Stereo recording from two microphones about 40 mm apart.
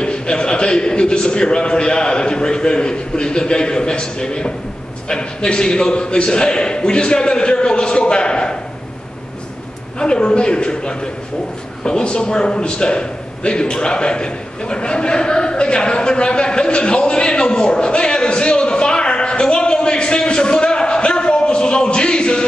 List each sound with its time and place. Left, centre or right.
0.0 s a man's voice: left
9.9 s a man's voice: left
11.8 s a sound: left